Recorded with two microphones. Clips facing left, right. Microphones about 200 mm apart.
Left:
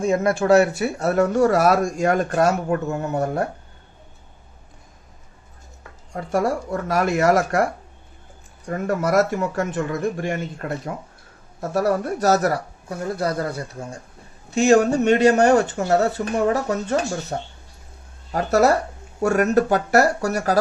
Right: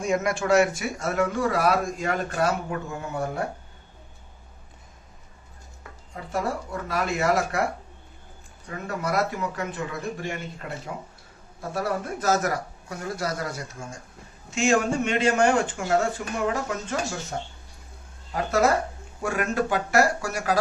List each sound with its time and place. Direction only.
0.0 s speech: 30° left (ahead or behind)
6.2 s speech: 55° left (ahead or behind)
8.6 s speech: 45° left (ahead or behind)